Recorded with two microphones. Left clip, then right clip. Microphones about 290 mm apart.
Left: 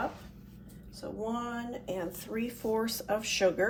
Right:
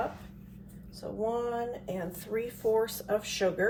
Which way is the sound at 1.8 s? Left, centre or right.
Centre.